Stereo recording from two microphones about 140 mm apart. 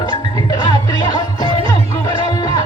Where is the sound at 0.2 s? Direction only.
30° left (ahead or behind).